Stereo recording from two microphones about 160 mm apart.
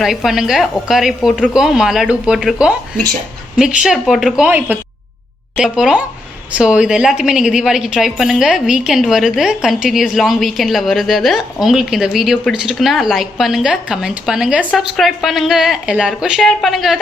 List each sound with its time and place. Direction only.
0.0 s a woman's voice: centre (ahead or behind)